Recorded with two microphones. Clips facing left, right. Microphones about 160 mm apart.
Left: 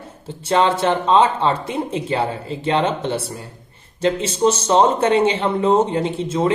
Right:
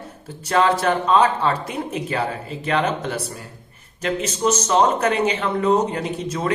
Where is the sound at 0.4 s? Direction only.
25° left (ahead or behind).